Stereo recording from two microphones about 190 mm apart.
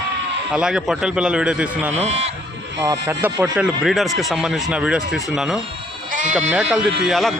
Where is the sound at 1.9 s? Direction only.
35° right (ahead or behind).